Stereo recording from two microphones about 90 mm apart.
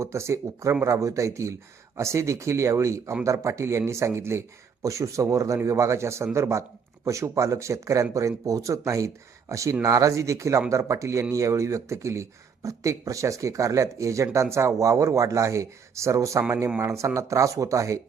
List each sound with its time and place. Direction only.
0.0 s speech: 30° right (ahead or behind)